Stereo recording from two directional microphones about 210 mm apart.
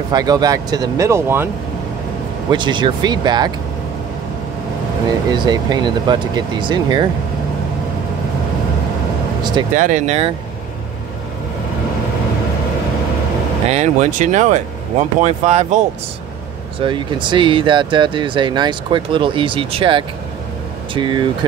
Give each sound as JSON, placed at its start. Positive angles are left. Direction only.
{"t": 0.1, "sound": "speech", "side_deg": -20}
{"t": 2.5, "sound": "speech", "side_deg": -20}
{"t": 5.3, "sound": "speech", "side_deg": -20}
{"t": 9.4, "sound": "speech", "side_deg": -20}
{"t": 9.8, "sound": "speech", "side_deg": -35}
{"t": 13.7, "sound": "speech", "side_deg": -35}
{"t": 16.8, "sound": "speech", "side_deg": -25}